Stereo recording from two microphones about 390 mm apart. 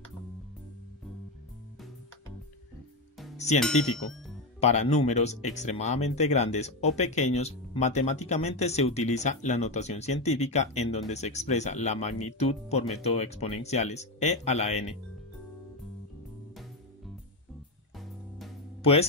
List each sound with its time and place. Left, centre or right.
3.5 s speech: centre
4.6 s speech: centre
18.8 s speech: centre